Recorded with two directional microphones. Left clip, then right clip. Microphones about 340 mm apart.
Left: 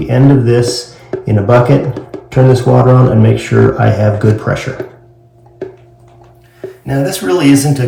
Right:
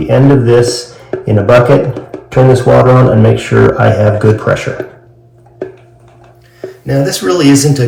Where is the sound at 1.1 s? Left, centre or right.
Left.